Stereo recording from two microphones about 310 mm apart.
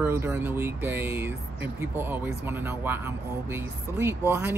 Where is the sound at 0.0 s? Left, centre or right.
Centre.